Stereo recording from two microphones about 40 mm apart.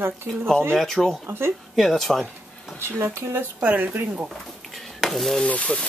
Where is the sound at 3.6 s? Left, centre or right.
Right.